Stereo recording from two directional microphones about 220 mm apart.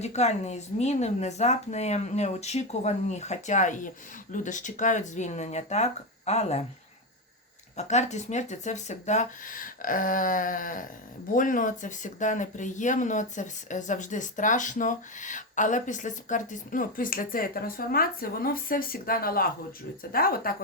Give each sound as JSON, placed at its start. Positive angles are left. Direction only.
{"t": 0.0, "sound": "speech", "side_deg": 30}
{"t": 7.8, "sound": "speech", "side_deg": 30}